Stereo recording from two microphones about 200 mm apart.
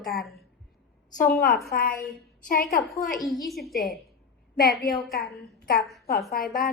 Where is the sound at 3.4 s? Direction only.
Centre (ahead or behind).